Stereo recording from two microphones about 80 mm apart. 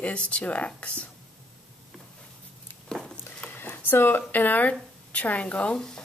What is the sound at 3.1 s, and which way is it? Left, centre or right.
Speech, left.